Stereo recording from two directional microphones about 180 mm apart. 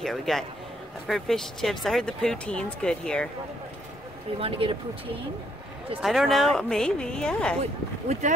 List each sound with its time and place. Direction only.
0.0 s speech: centre (ahead or behind)
4.4 s speech: 30° right (ahead or behind)
5.9 s speech: centre (ahead or behind)